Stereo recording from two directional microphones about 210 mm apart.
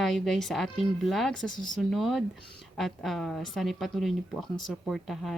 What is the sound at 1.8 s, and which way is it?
A woman's voice, centre (ahead or behind).